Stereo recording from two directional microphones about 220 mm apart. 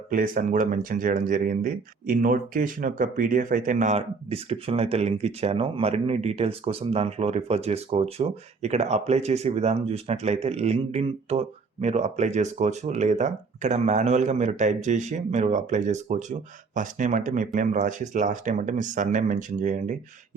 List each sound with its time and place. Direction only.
0.1 s speech: 40° right (ahead or behind)